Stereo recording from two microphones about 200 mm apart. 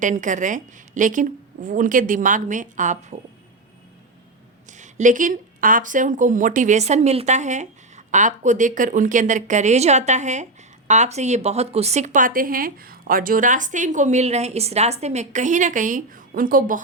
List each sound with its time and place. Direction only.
0.0 s speech: 40° right (ahead or behind)
4.8 s speech: 40° right (ahead or behind)